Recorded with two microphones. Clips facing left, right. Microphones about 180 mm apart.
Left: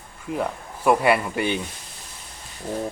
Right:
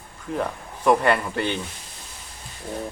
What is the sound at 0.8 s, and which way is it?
Speech, 10° left (ahead or behind).